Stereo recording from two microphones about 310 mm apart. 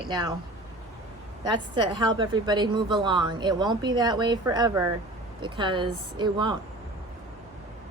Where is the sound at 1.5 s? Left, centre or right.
Centre.